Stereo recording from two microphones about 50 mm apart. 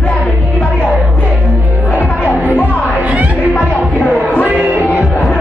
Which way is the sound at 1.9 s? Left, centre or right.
Left.